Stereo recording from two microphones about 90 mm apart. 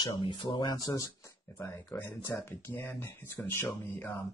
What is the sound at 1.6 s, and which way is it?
A man's voice, 25° left (ahead or behind).